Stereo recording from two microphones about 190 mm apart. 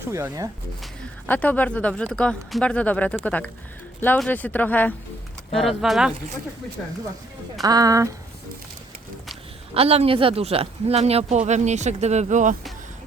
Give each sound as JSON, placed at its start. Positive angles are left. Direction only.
{"t": 0.1, "sound": "speech", "side_deg": -15}
{"t": 1.3, "sound": "speech", "side_deg": 10}
{"t": 7.6, "sound": "speech", "side_deg": -20}
{"t": 9.3, "sound": "speech", "side_deg": -30}